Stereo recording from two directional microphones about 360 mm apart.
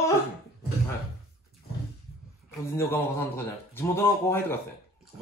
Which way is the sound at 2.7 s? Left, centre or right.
Centre.